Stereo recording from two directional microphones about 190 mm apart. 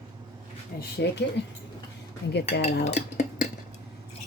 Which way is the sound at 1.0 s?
60° left (ahead or behind).